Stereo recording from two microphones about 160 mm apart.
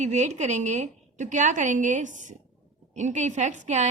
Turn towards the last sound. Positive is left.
turn(degrees=-45)  # may be behind; listen again after turning